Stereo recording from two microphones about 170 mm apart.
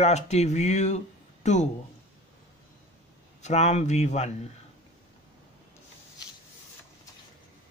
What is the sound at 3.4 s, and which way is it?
Speech, 40° left (ahead or behind).